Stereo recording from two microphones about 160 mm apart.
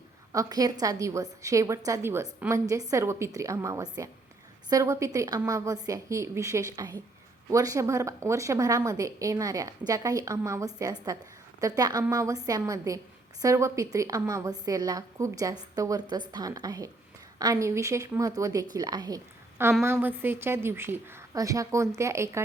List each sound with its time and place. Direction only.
0.3 s a woman's voice: 20° right (ahead or behind)